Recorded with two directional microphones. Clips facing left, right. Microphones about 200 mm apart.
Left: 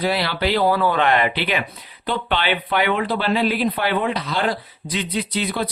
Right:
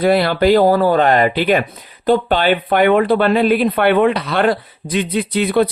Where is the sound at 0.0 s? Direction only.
50° right (ahead or behind).